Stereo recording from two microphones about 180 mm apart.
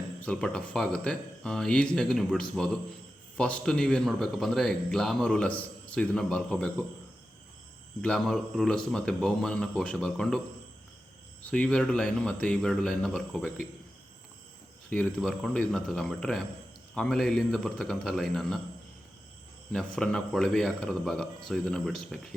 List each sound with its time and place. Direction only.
0.2 s a man's voice: 5° left (ahead or behind)
8.0 s a man's voice: 5° left (ahead or behind)
11.5 s a man's voice: 5° left (ahead or behind)
14.8 s a man's voice: centre (ahead or behind)
19.7 s a man's voice: 5° left (ahead or behind)